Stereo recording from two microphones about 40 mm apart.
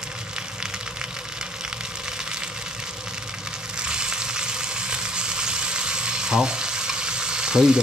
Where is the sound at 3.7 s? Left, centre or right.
Right.